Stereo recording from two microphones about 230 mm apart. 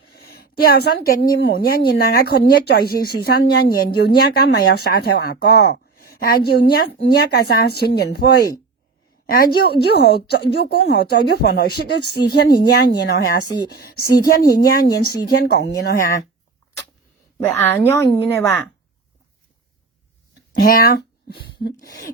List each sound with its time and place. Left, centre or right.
0.1 s speech: left
17.4 s a woman's voice: centre
20.6 s speech: left